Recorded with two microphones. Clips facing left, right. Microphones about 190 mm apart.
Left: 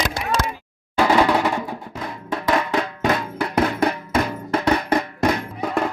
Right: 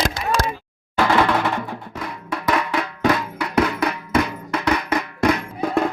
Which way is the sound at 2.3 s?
25° left (ahead or behind).